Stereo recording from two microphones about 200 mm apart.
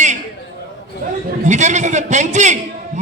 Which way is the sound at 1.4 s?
35° right (ahead or behind).